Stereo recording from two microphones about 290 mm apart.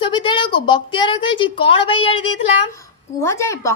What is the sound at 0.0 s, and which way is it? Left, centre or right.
A woman's voice, centre.